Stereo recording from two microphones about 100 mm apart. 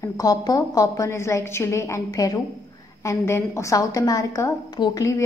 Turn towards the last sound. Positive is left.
turn(degrees=40)  # may be behind; listen again after turning